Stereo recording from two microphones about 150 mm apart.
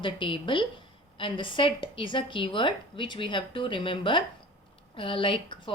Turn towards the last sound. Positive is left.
turn(degrees=35)  # may be behind; listen again after turning